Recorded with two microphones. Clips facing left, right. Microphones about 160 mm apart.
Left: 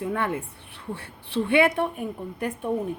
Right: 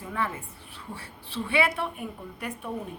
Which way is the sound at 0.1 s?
65° left (ahead or behind).